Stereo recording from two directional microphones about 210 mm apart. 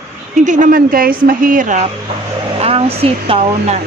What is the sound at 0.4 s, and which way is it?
A woman's voice, 40° right (ahead or behind).